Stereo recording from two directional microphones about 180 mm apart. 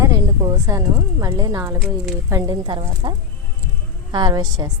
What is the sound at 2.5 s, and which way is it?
A woman's voice, 25° right (ahead or behind).